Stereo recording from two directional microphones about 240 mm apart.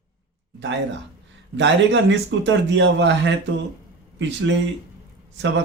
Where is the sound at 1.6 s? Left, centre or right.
Right.